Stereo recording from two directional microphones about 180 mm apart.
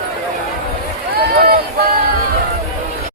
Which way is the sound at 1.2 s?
55° right (ahead or behind).